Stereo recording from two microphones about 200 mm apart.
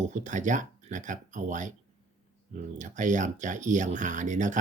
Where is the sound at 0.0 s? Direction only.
40° right (ahead or behind).